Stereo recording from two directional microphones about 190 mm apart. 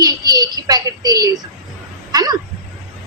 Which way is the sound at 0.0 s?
20° right (ahead or behind).